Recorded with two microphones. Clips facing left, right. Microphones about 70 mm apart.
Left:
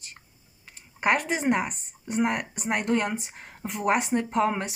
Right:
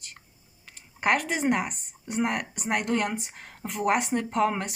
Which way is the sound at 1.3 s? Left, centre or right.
Left.